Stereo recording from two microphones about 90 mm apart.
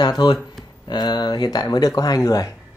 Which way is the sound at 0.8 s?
55° left (ahead or behind).